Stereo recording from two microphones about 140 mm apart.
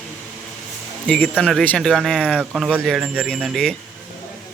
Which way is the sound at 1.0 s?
10° left (ahead or behind).